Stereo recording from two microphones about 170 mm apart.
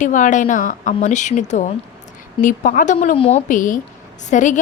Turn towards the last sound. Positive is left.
turn(degrees=45)  # may be behind; listen again after turning